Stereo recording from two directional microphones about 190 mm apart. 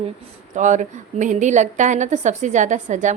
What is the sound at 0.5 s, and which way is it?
A woman's voice, 40° right (ahead or behind).